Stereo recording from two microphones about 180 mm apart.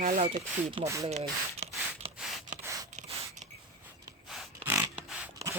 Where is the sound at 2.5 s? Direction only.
40° right (ahead or behind).